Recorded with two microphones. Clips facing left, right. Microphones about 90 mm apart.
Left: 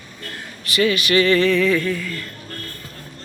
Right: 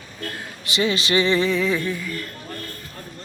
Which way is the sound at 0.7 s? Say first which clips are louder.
Left 3 dB; 25° right (ahead or behind).